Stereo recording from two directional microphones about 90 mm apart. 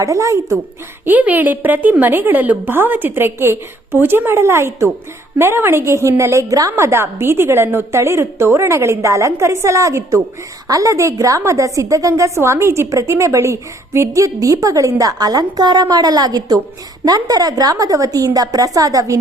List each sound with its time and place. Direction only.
0.0 s a woman's voice: 35° right (ahead or behind)
1.0 s a woman's voice: 20° right (ahead or behind); by 19.2 s 40° right (ahead or behind)